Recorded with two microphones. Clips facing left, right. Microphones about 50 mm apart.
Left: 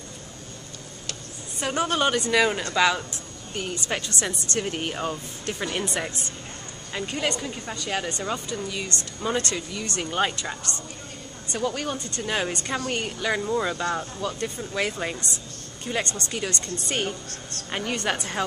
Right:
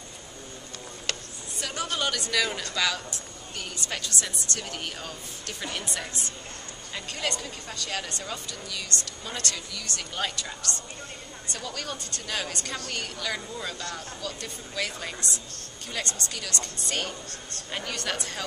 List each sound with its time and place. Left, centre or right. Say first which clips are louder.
1.6 s speech: left 7 dB; left
6.9 s a woman's voice: left 5 dB; centre